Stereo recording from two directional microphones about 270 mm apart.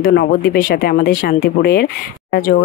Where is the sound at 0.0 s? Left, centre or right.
Left.